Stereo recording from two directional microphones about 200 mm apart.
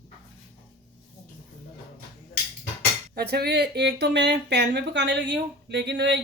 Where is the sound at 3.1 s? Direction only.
50° right (ahead or behind).